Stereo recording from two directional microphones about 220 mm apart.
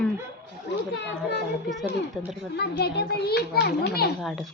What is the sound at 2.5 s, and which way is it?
A child's voice, 50° left (ahead or behind).